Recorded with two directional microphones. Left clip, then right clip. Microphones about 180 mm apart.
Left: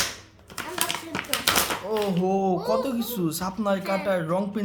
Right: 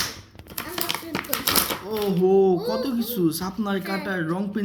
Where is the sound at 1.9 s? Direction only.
15° left (ahead or behind).